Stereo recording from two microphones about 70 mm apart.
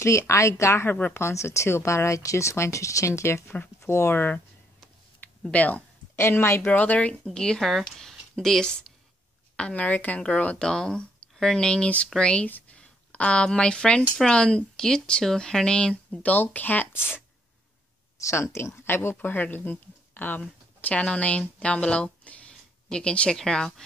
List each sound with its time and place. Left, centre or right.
0.0 s speech: left
0.8 s speech: left
1.2 s speech: left
5.5 s speech: left
6.1 s speech: left
7.2 s speech: centre
9.6 s speech: centre
18.1 s speech: left
19.1 s speech: left; by 23.7 s centre